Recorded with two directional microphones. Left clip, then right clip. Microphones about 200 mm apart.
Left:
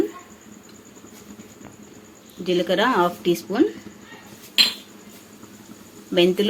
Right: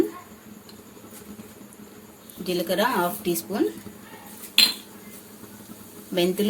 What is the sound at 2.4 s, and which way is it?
Speech, 30° left (ahead or behind).